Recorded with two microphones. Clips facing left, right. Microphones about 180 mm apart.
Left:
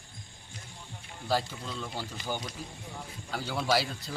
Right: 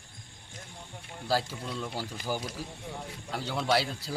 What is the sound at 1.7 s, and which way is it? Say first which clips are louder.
A man's voice: right 2 dB; 10° right (ahead or behind).